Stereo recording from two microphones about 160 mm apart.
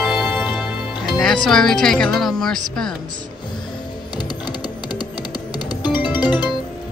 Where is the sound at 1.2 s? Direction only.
5° left (ahead or behind).